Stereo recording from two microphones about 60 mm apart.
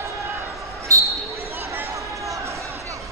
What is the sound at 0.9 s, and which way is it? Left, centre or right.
Basketball bounce, right.